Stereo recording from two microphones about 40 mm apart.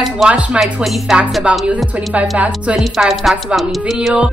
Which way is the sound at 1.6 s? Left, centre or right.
Right.